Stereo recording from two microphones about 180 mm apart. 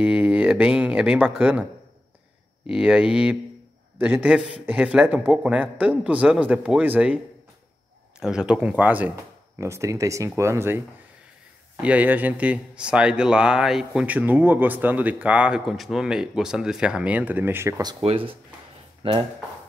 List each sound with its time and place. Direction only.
0.0 s speech: 5° right (ahead or behind)
8.2 s speech: 5° right (ahead or behind)
11.8 s speech: 10° right (ahead or behind)
18.0 s speech: 30° right (ahead or behind)